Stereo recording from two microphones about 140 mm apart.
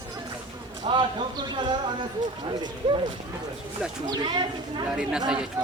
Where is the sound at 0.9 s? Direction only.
35° right (ahead or behind).